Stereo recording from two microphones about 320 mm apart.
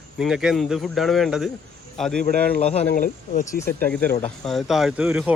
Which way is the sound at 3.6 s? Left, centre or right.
Centre.